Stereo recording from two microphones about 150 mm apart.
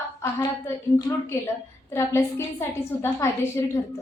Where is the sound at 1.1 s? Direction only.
20° left (ahead or behind).